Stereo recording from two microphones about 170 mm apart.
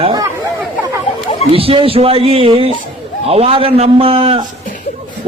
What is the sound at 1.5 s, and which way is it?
A man's voice, 35° right (ahead or behind).